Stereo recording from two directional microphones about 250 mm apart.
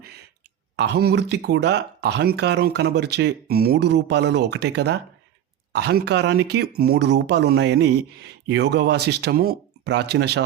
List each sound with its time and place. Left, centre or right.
0.8 s speech: right